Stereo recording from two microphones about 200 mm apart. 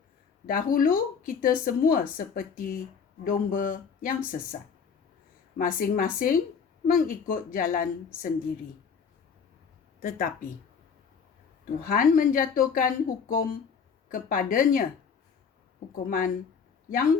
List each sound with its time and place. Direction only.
0.4 s speech: 45° left (ahead or behind)
5.5 s speech: 45° left (ahead or behind)
10.0 s speech: 45° left (ahead or behind)
11.8 s speech: 45° left (ahead or behind)
16.0 s speech: 45° left (ahead or behind)